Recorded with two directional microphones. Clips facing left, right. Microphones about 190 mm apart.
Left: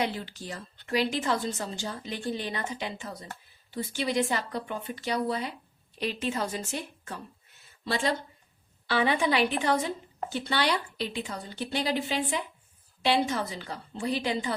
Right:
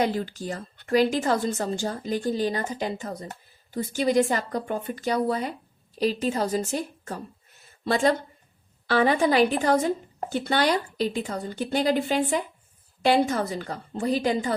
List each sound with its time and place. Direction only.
0.0 s a woman's voice: 45° right (ahead or behind)